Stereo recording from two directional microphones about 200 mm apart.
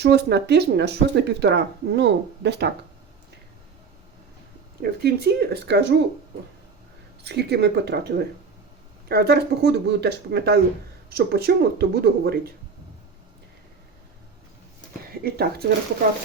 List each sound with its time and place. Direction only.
0.0 s speech: 55° right (ahead or behind)
4.8 s speech: 50° right (ahead or behind)
7.3 s speech: 55° right (ahead or behind)
15.2 s speech: 50° right (ahead or behind)